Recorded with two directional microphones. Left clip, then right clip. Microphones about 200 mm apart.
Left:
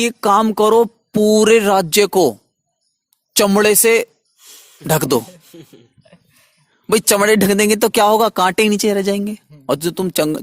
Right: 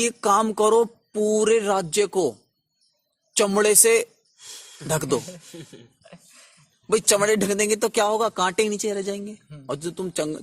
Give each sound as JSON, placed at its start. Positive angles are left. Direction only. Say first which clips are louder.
{"t": 0.0, "sound": "speech", "louder": "left 6 dB", "side_deg": 45}
{"t": 3.3, "sound": "speech", "louder": "left 6 dB", "side_deg": 50}
{"t": 5.5, "sound": "speech", "louder": "left 1 dB", "side_deg": 0}
{"t": 6.8, "sound": "speech", "louder": "left 6 dB", "side_deg": 50}